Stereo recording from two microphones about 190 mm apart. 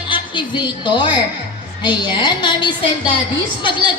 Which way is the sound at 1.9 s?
25° left (ahead or behind).